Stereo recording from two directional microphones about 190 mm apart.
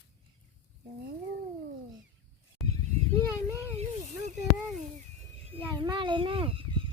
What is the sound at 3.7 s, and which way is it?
Snake, 35° right (ahead or behind).